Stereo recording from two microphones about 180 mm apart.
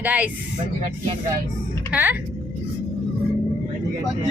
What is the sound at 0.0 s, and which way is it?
Speech, 10° right (ahead or behind).